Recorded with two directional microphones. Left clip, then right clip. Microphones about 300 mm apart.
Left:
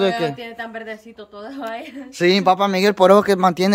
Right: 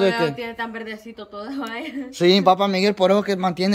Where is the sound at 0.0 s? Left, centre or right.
Centre.